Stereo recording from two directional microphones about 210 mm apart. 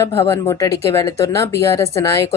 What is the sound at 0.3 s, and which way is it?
Speech, 15° left (ahead or behind).